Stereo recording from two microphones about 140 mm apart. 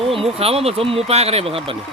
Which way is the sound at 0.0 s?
45° right (ahead or behind).